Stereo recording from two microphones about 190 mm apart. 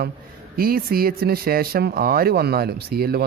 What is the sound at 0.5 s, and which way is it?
Speech, 50° right (ahead or behind).